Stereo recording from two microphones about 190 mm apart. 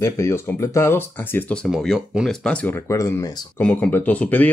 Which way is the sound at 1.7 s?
Centre (ahead or behind).